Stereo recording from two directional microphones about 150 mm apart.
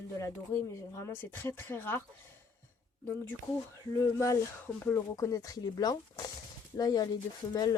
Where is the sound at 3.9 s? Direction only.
25° left (ahead or behind).